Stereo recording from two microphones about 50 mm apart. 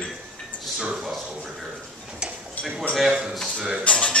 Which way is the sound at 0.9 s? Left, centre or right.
Centre.